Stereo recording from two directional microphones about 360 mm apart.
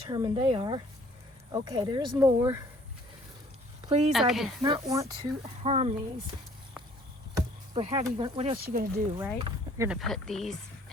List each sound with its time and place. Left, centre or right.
0.1 s speech: centre
3.8 s speech: centre
4.1 s speech: centre
7.3 s speech: centre
9.1 s speech: centre